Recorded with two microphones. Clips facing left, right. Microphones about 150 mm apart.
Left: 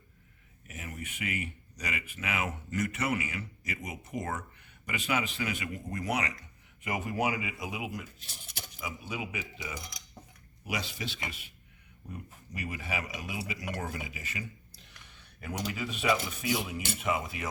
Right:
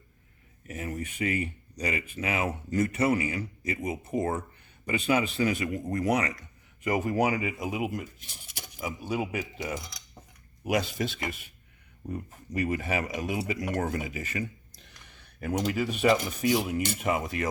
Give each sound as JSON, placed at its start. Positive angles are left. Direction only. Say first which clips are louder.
{"t": 0.7, "sound": "speech", "louder": "right 8 dB", "side_deg": -35}
{"t": 12.5, "sound": "speech", "louder": "right 8 dB", "side_deg": -45}
{"t": 15.7, "sound": "speech", "louder": "right 5 dB", "side_deg": -45}